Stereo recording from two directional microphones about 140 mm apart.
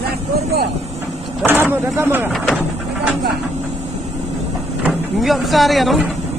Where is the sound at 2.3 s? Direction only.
Centre (ahead or behind).